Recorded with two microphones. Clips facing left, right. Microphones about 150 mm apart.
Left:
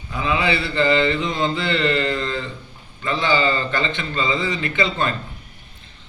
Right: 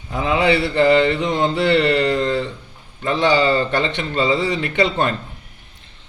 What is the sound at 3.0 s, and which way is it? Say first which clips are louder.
A man's voice: right 4 dB; 60° right (ahead or behind).